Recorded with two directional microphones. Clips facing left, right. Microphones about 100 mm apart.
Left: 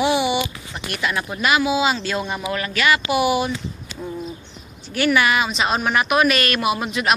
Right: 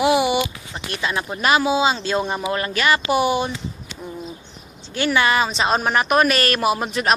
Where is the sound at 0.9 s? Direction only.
25° right (ahead or behind).